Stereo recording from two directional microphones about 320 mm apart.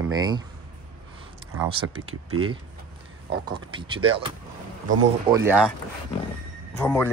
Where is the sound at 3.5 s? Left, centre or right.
Centre.